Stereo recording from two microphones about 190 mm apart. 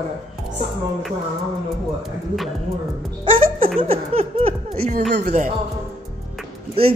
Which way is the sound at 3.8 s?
30° right (ahead or behind).